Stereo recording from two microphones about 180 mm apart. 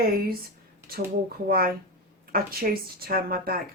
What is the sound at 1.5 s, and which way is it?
Speech, 55° right (ahead or behind).